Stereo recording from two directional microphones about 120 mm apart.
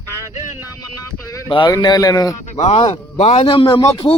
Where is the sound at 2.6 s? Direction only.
65° left (ahead or behind).